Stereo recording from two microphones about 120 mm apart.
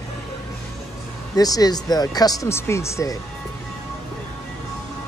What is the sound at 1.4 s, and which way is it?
Speech, 30° left (ahead or behind).